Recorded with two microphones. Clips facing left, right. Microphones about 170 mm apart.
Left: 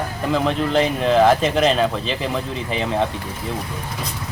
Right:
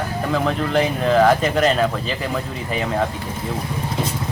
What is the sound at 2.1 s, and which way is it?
Speech, 25° left (ahead or behind).